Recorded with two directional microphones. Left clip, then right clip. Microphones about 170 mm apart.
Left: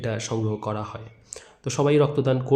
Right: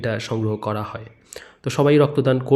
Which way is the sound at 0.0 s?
20° right (ahead or behind).